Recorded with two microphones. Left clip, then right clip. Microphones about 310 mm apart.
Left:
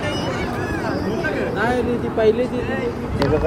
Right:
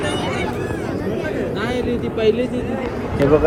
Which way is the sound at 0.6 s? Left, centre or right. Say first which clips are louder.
Left 1 dB; centre.